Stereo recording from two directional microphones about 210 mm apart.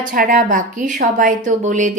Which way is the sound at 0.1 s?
40° right (ahead or behind).